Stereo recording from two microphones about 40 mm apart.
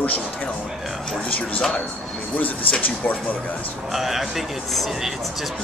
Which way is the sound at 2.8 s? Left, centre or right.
Left.